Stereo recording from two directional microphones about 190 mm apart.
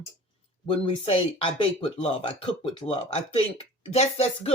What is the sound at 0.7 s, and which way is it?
Speech, 25° left (ahead or behind).